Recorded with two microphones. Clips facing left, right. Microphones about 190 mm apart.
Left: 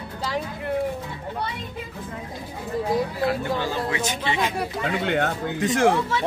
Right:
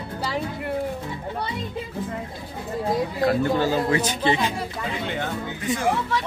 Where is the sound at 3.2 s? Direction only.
40° right (ahead or behind).